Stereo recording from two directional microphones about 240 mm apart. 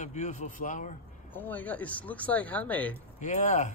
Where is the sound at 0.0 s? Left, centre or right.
Left.